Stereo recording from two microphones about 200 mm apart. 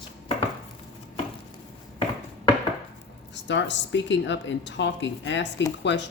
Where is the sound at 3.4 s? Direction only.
65° left (ahead or behind).